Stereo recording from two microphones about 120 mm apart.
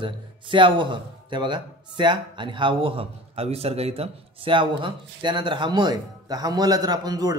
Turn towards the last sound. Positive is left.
turn(degrees=-30)  # may be behind; listen again after turning